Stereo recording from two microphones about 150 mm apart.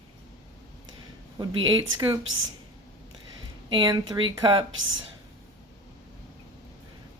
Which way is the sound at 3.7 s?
30° right (ahead or behind).